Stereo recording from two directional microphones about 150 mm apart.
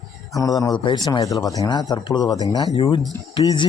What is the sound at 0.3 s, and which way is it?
Speech, 25° left (ahead or behind).